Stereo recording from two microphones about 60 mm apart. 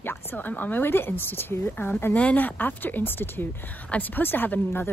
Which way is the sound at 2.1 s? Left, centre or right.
Left.